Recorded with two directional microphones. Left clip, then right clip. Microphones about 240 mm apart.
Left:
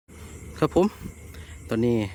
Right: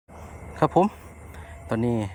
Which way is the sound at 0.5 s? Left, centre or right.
Centre.